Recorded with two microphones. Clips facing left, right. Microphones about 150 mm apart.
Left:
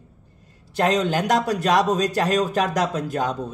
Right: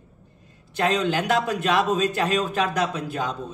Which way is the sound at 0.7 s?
40° left (ahead or behind).